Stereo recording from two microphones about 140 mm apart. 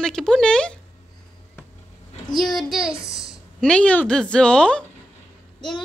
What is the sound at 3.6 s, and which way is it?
A woman's voice, 10° left (ahead or behind).